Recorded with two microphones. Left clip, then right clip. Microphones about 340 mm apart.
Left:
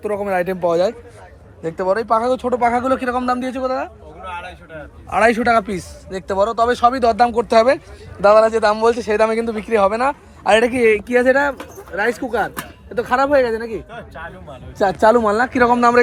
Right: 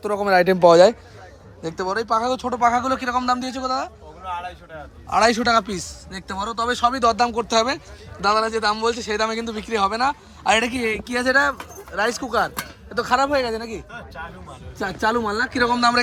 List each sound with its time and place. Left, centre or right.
0.0 s a man's voice: centre
1.8 s a man's voice: centre
5.0 s a man's voice: centre
14.8 s speech: centre